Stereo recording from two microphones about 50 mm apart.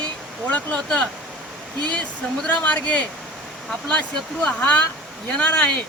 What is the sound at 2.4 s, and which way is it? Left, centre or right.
Speech, left.